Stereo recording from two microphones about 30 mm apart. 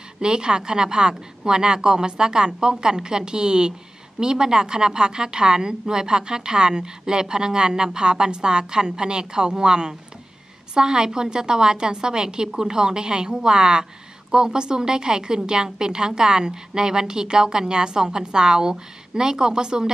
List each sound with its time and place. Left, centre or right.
0.2 s a woman's voice: right